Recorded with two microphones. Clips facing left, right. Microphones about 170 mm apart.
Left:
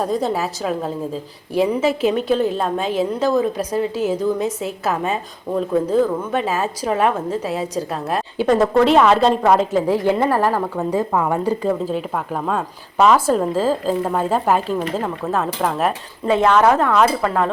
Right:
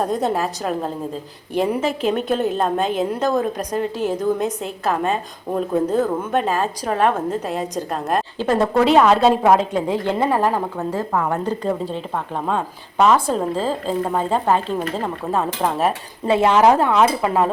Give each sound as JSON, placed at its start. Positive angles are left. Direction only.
{"t": 0.0, "sound": "a woman's voice", "side_deg": 0}
{"t": 11.1, "sound": "a woman's voice", "side_deg": 10}
{"t": 16.2, "sound": "a woman's voice", "side_deg": -25}
{"t": 16.9, "sound": "speech", "side_deg": -10}